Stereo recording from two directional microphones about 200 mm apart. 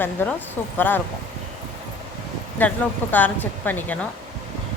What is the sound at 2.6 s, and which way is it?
Speech, 10° left (ahead or behind).